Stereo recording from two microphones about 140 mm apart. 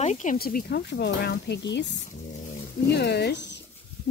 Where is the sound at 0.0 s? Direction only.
60° left (ahead or behind); by 0.7 s 90° left.